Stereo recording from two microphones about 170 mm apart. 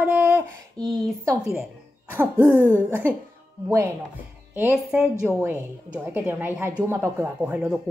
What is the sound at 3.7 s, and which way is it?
Speech, 15° right (ahead or behind).